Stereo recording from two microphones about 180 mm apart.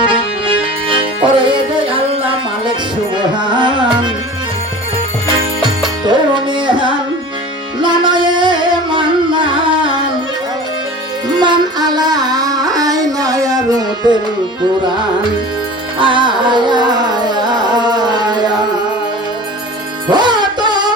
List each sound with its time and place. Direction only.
0.0 s music: 30° right (ahead or behind)
6.1 s tabla: 25° right (ahead or behind)
7.8 s music: 25° right (ahead or behind)
11.3 s music: 25° right (ahead or behind)
16.0 s music: 25° right (ahead or behind)
20.1 s music: 25° right (ahead or behind)